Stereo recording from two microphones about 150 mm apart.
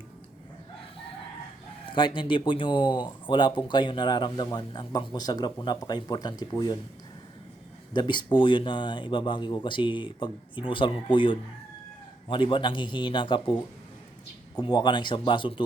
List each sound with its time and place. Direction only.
1.9 s speech: 35° left (ahead or behind)
7.9 s speech: 30° left (ahead or behind)